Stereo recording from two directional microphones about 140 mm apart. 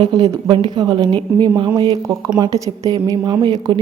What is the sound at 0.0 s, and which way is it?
A woman's voice, 30° right (ahead or behind).